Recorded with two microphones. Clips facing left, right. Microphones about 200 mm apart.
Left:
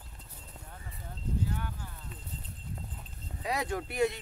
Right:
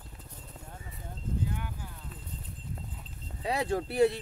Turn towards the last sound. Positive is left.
turn(degrees=-35)  # may be behind; listen again after turning